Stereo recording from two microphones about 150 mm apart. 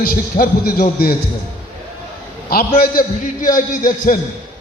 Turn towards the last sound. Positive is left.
turn(degrees=65)  # may be behind; listen again after turning